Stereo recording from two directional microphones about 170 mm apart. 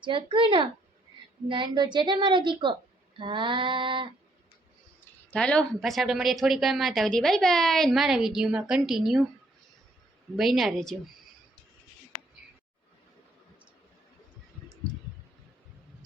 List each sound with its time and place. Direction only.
0.0 s a woman's voice: 30° right (ahead or behind)
4.9 s speech: 5° left (ahead or behind)
10.3 s speech: centre (ahead or behind)